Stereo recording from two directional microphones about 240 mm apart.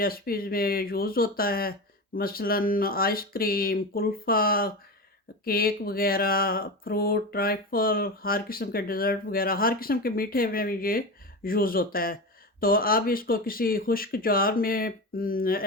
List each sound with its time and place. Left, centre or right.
0.0 s speech: left